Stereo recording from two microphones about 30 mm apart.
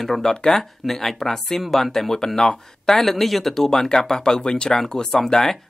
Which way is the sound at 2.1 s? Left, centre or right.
Left.